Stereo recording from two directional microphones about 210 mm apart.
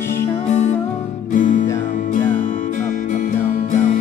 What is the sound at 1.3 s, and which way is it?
Music, 40° left (ahead or behind).